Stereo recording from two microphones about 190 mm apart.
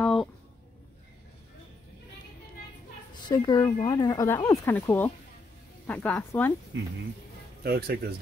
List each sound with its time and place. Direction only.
0.0 s a sound: centre (ahead or behind)
3.3 s speech: 20° left (ahead or behind)
6.7 s speech: 75° right (ahead or behind)
7.6 s speech: 55° right (ahead or behind)